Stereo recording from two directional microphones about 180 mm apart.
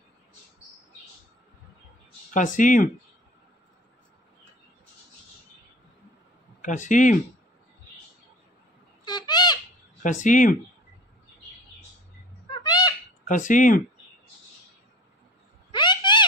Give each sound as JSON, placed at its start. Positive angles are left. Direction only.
{"t": 2.3, "sound": "speech", "side_deg": 45}
{"t": 6.6, "sound": "speech", "side_deg": 45}
{"t": 9.0, "sound": "bird", "side_deg": 25}
{"t": 10.0, "sound": "speech", "side_deg": 45}
{"t": 12.4, "sound": "a sound", "side_deg": 20}
{"t": 13.2, "sound": "speech", "side_deg": 45}
{"t": 15.7, "sound": "a sound", "side_deg": 25}